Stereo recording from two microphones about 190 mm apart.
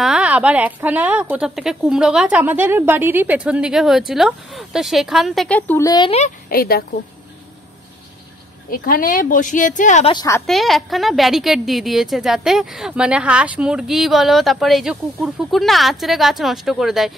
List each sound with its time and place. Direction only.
0.0 s a woman's voice: 5° right (ahead or behind); by 6.3 s 30° left (ahead or behind)
6.5 s speech: 50° left (ahead or behind)
8.6 s speech: 50° left (ahead or behind)
10.0 s a woman's voice: 20° left (ahead or behind)
10.4 s a woman's voice: centre (ahead or behind)